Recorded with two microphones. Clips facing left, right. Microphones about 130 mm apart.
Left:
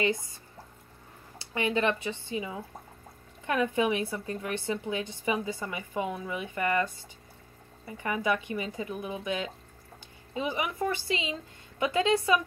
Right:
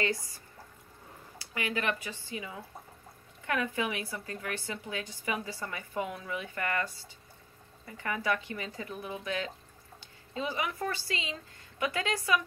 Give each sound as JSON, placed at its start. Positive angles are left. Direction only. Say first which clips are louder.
{"t": 0.0, "sound": "a woman's voice", "louder": "left 4 dB", "side_deg": 20}
{"t": 1.4, "sound": "a woman's voice", "louder": "left 6 dB", "side_deg": 25}